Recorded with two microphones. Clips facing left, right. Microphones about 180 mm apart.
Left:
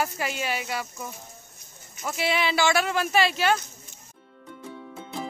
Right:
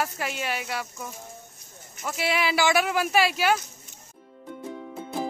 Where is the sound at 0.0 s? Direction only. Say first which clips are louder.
Left 1 dB; centre (ahead or behind).